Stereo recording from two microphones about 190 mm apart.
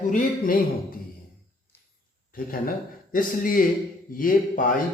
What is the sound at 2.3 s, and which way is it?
Mantra, 50° left (ahead or behind).